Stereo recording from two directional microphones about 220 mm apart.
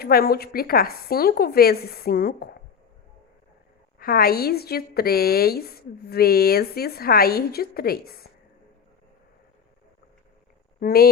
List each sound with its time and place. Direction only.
0.0 s a woman's voice: 45° left (ahead or behind)
3.9 s a woman's voice: 45° left (ahead or behind)
10.8 s speech: 45° left (ahead or behind)